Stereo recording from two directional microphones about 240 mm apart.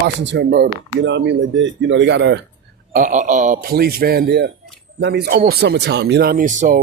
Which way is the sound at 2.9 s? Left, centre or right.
Right.